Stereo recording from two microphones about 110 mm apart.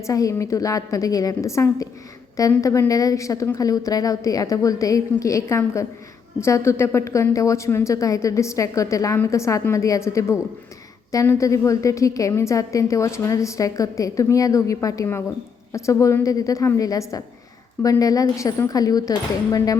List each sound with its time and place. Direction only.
0.0 s a woman's voice: 30° left (ahead or behind)